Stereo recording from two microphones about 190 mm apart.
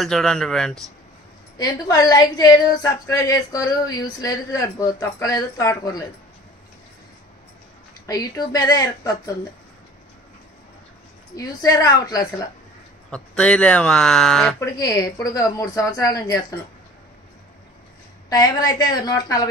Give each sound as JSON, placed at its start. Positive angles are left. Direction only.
{"t": 0.0, "sound": "speech", "side_deg": 5}
{"t": 1.6, "sound": "a woman's voice", "side_deg": 20}
{"t": 8.1, "sound": "a woman's voice", "side_deg": 20}
{"t": 11.3, "sound": "a woman's voice", "side_deg": 20}
{"t": 13.1, "sound": "speech", "side_deg": 5}
{"t": 14.6, "sound": "a woman's voice", "side_deg": 20}
{"t": 18.3, "sound": "a woman's voice", "side_deg": 20}